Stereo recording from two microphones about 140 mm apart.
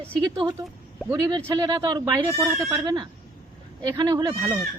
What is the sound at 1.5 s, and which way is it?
Speech, 25° right (ahead or behind).